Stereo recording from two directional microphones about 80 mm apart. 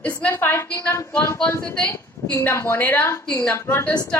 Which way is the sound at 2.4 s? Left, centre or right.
Left.